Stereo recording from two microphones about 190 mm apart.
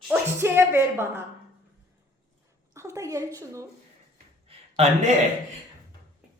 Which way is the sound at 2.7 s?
15° right (ahead or behind).